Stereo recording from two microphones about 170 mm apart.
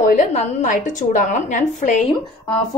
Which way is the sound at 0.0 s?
45° left (ahead or behind).